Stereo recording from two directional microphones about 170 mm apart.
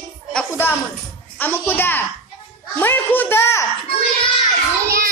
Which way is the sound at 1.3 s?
10° left (ahead or behind).